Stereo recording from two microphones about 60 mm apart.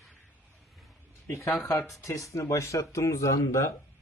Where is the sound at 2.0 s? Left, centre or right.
Left.